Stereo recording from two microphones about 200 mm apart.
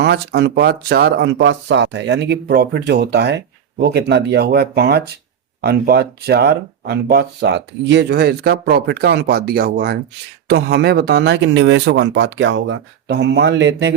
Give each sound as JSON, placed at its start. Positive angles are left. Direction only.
{"t": 0.0, "sound": "speech", "side_deg": -55}